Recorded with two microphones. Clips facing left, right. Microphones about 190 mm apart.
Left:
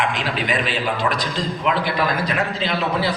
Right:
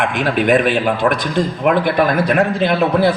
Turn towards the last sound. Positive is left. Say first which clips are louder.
# right 8 dB
turn(degrees=-55)  # may be behind; listen again after turning